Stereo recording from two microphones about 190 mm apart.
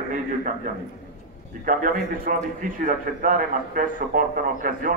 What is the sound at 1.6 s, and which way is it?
A man's voice, 45° right (ahead or behind).